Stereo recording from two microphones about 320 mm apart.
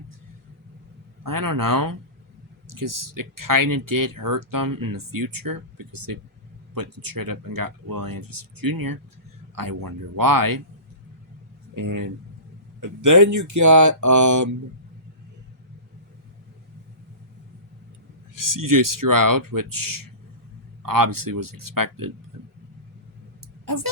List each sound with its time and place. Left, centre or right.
1.2 s speech: right
11.7 s speech: right
12.8 s speech: right
18.3 s speech: right
23.6 s speech: right